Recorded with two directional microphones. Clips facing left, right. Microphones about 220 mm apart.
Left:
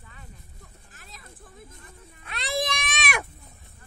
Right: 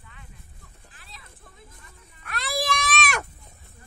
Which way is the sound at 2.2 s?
20° left (ahead or behind).